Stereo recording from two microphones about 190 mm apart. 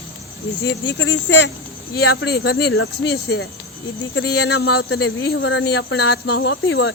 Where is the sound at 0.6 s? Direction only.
70° left (ahead or behind).